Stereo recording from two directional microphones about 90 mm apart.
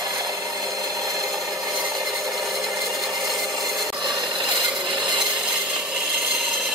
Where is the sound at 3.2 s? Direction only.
50° right (ahead or behind); by 5.2 s 65° right (ahead or behind).